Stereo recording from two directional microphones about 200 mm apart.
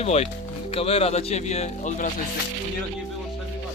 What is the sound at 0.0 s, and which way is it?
Speech, 30° left (ahead or behind).